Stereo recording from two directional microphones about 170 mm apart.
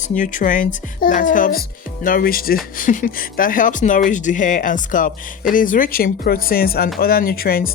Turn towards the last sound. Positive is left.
turn(degrees=60)  # may be behind; listen again after turning